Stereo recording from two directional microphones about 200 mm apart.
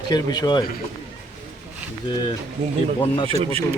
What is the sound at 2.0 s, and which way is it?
Speech, 25° left (ahead or behind).